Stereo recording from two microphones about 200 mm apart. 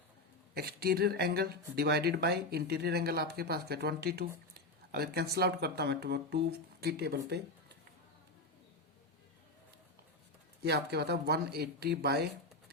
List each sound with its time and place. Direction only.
0.5 s speech: 50° right (ahead or behind)
10.6 s speech: 55° right (ahead or behind)